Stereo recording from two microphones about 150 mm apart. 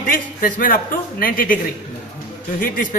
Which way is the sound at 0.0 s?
65° left (ahead or behind).